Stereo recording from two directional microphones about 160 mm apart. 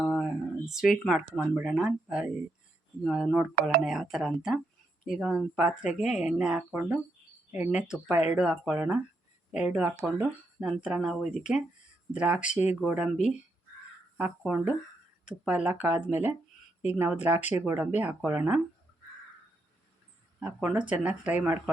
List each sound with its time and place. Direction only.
0.0 s speech: centre (ahead or behind)
12.4 s speech: 50° left (ahead or behind)
12.8 s speech: 5° right (ahead or behind)
14.2 s speech: 10° right (ahead or behind)
20.4 s speech: 5° right (ahead or behind)